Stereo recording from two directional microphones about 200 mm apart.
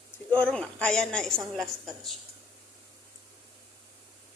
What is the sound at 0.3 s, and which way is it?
A woman's voice, 5° left (ahead or behind).